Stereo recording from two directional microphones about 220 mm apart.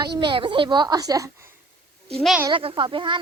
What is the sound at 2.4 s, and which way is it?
Speech, 25° right (ahead or behind).